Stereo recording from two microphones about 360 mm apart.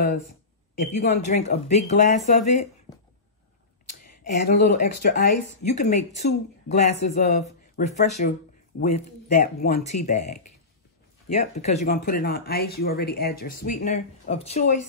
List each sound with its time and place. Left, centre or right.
0.7 s speech: left
4.0 s speech: left